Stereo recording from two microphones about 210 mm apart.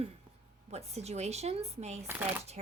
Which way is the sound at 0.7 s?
30° right (ahead or behind).